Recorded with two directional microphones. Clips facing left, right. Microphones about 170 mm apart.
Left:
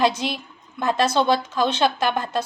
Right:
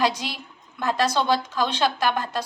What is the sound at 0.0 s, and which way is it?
Speech, 25° left (ahead or behind).